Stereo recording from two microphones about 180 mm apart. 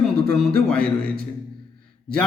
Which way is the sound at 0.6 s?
5° left (ahead or behind).